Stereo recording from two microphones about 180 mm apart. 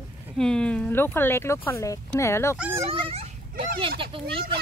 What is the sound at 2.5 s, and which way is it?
Speech, 5° right (ahead or behind).